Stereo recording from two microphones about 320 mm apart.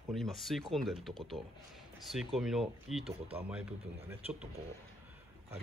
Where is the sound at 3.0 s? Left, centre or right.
Centre.